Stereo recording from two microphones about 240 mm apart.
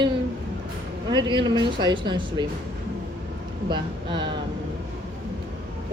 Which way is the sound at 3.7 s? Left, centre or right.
Centre.